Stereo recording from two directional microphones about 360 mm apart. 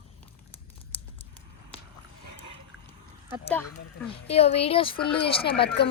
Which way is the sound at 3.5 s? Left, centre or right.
Centre.